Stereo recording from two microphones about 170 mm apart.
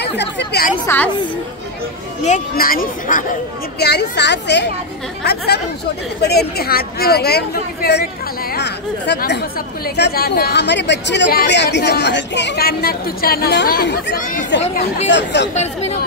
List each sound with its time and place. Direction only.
0.0 s a woman's voice: 85° left
0.8 s a woman's voice: 10° left (ahead or behind)
2.2 s speech: 55° left (ahead or behind)
3.8 s a woman's voice: 80° left
5.2 s a woman's voice: 70° left (ahead or behind)
14.1 s speech: 55° left (ahead or behind)
15.0 s speech: 90° left
15.5 s speech: 40° left (ahead or behind)